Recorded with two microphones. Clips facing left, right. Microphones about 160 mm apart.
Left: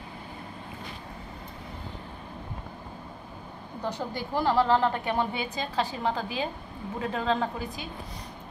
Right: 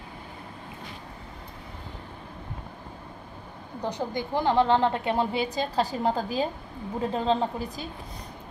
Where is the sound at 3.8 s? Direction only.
15° right (ahead or behind).